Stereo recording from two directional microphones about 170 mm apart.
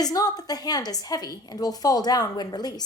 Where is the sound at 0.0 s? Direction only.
20° left (ahead or behind).